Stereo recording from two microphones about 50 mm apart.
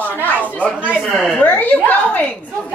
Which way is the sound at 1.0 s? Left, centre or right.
Centre.